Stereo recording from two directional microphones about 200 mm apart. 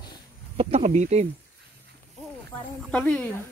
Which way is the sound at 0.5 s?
35° right (ahead or behind).